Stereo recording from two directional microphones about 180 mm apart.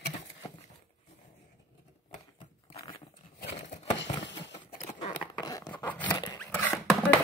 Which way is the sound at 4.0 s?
85° left.